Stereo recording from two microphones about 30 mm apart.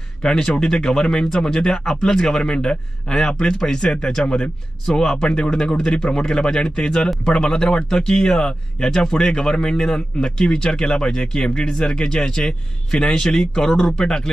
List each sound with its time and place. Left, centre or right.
0.2 s speech: centre
5.5 s speech: centre